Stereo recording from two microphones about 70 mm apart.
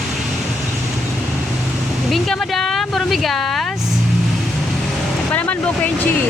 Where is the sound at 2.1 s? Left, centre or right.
Centre.